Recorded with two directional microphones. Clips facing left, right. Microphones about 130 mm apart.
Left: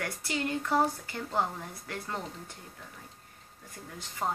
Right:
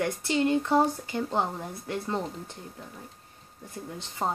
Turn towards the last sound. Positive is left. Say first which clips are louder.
# right 3 dB
turn(degrees=-25)  # may be behind; listen again after turning